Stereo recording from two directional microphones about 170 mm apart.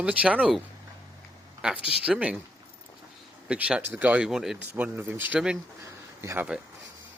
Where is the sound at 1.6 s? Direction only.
5° right (ahead or behind).